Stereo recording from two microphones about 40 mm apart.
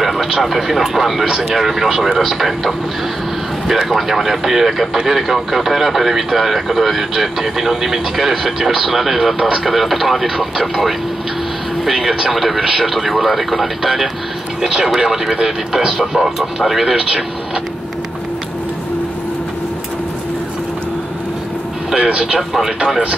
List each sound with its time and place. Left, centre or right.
0.0 s speech: centre
16.9 s speech: centre
21.9 s speech: right